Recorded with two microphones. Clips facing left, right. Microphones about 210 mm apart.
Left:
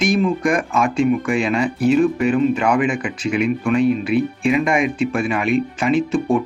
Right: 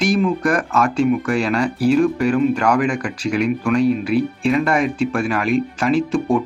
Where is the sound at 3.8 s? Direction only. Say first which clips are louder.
Even; 35° right (ahead or behind).